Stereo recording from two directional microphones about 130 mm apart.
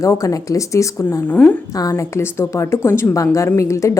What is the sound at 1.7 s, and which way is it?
A woman's voice, 30° left (ahead or behind).